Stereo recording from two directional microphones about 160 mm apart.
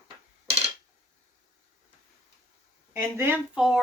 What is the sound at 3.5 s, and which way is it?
Speech, 5° right (ahead or behind).